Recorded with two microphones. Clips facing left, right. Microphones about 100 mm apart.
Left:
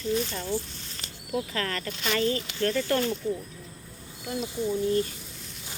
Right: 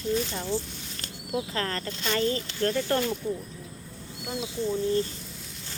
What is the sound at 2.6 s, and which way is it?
Speech, 20° right (ahead or behind).